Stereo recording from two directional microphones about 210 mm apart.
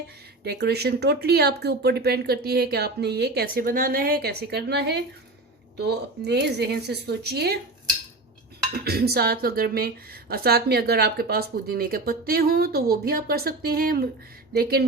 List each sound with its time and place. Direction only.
0.4 s speech: 50° right (ahead or behind)
8.7 s speech: 45° right (ahead or behind)